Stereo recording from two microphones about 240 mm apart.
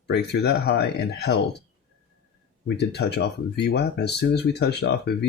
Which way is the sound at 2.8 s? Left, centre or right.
Left.